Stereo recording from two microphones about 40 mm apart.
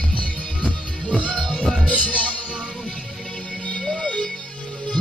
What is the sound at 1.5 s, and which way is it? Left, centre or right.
Music, centre.